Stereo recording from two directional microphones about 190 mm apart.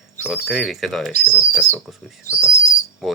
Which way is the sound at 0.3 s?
5° right (ahead or behind).